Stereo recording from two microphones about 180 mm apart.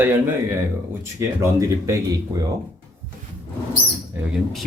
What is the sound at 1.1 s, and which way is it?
Speech, 20° right (ahead or behind).